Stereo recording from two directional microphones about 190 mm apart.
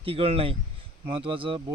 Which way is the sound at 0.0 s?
30° right (ahead or behind).